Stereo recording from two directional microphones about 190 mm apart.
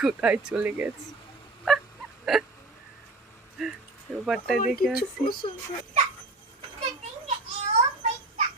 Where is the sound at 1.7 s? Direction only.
Centre (ahead or behind).